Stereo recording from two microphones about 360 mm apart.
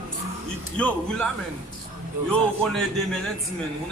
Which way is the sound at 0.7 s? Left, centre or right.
Centre.